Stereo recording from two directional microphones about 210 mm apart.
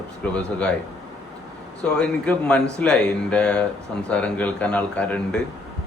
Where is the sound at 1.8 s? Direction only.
5° left (ahead or behind).